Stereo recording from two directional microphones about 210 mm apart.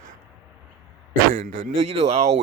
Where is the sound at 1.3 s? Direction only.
35° right (ahead or behind).